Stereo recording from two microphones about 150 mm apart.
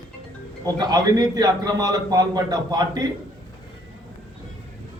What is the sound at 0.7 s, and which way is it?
A man's voice, 25° right (ahead or behind).